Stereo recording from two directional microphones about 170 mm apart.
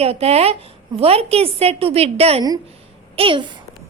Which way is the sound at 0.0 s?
35° right (ahead or behind).